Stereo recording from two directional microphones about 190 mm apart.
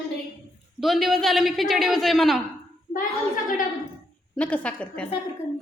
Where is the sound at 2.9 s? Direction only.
45° left (ahead or behind).